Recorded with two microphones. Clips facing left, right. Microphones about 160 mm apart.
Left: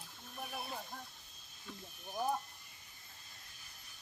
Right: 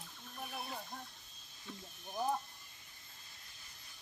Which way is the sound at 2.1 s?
5° left (ahead or behind).